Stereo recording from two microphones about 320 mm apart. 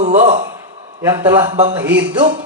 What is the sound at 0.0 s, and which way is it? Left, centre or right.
Speech, right.